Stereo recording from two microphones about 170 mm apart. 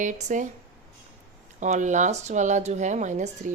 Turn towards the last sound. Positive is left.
turn(degrees=-45)  # may be behind; listen again after turning